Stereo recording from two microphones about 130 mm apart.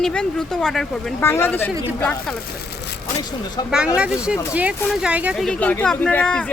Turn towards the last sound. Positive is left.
turn(degrees=10)  # may be behind; listen again after turning